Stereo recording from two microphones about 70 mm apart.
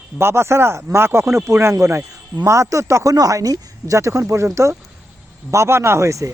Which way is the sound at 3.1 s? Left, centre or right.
Right.